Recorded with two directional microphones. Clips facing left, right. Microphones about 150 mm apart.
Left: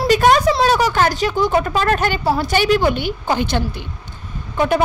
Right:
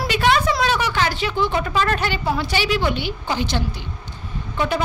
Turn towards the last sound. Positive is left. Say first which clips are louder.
# left 5 dB
turn(degrees=50)  # may be behind; listen again after turning